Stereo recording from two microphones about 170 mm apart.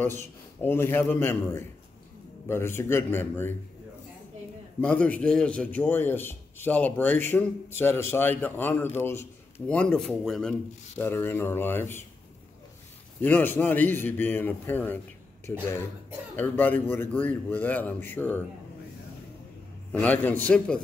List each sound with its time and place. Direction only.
0.0 s a man's voice: 15° left (ahead or behind)
4.8 s a man's voice: 10° left (ahead or behind)
11.0 s a man's voice: 15° left (ahead or behind)
13.2 s a man's voice: 10° left (ahead or behind)
19.9 s a man's voice: 10° left (ahead or behind)